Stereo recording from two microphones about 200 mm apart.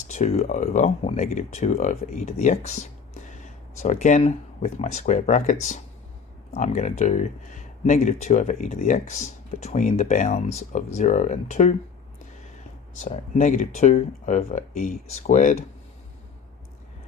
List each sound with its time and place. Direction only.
0.1 s speech: 35° left (ahead or behind)
13.1 s speech: 40° left (ahead or behind)